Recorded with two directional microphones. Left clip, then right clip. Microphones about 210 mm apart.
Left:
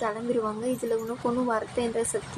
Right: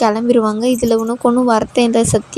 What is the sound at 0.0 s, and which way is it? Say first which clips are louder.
A woman's voice: right 14 dB; 45° right (ahead or behind).